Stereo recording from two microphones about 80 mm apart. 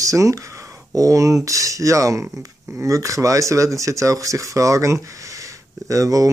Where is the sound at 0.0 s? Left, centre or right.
Right.